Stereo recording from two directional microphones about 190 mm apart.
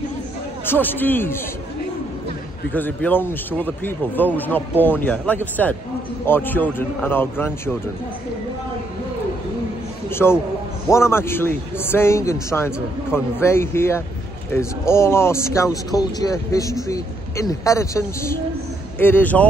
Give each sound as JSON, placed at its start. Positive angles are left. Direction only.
{"t": 0.7, "sound": "a man's voice", "side_deg": 10}
{"t": 2.7, "sound": "a man's voice", "side_deg": 10}
{"t": 10.0, "sound": "a man's voice", "side_deg": 10}